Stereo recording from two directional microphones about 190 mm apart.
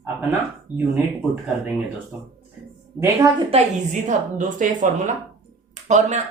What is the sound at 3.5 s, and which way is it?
A woman's voice, 35° right (ahead or behind).